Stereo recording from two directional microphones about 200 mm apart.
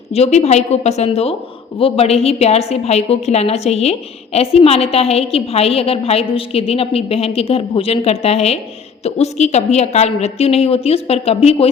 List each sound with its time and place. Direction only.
0.1 s a woman's voice: 35° left (ahead or behind)